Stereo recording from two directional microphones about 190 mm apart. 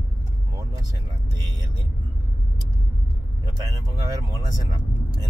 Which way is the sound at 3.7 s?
20° right (ahead or behind).